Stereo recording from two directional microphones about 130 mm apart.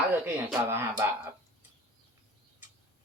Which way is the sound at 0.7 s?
20° right (ahead or behind).